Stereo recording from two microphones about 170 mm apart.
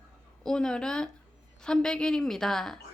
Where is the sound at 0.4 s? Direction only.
5° left (ahead or behind).